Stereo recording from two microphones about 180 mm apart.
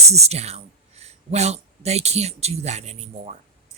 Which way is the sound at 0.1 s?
35° right (ahead or behind).